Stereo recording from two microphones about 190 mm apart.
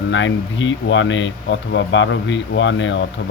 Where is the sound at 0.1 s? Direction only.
75° left (ahead or behind).